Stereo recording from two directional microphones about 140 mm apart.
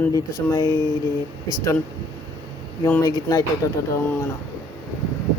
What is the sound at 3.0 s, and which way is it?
Speech, 25° left (ahead or behind).